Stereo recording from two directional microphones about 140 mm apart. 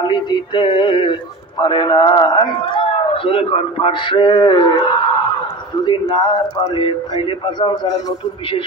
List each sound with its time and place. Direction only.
0.0 s a man's voice: 35° left (ahead or behind)